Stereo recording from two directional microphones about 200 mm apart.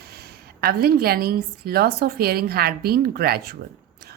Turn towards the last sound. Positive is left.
turn(degrees=-50)  # may be behind; listen again after turning